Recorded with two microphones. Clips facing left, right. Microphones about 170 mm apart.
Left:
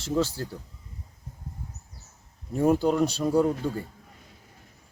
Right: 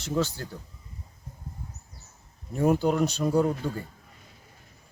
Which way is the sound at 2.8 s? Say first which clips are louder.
Left 1 dB; 5° right (ahead or behind).